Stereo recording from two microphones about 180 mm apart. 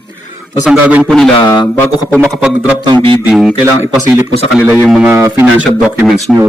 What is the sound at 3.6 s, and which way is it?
Speech, 15° right (ahead or behind).